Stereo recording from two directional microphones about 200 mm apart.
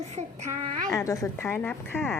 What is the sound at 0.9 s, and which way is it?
Speech, 15° left (ahead or behind).